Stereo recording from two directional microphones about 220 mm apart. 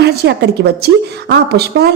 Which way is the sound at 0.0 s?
45° right (ahead or behind).